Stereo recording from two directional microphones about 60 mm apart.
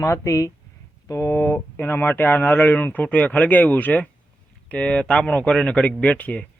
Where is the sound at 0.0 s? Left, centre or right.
Left.